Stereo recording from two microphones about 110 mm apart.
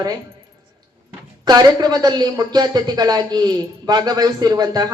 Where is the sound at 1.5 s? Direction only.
35° right (ahead or behind).